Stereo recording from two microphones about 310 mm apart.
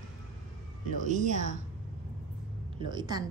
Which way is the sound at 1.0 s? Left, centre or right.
Right.